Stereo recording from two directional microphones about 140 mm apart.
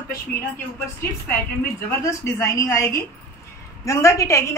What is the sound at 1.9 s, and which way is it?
A woman's voice, 20° left (ahead or behind).